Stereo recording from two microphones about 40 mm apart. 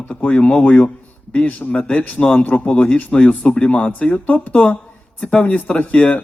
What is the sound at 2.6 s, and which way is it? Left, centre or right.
A man's voice, left.